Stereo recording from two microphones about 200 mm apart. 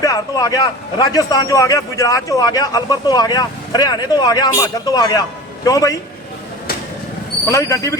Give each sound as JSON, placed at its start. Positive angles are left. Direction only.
{"t": 0.0, "sound": "a man's voice", "side_deg": 15}
{"t": 7.4, "sound": "speech", "side_deg": 15}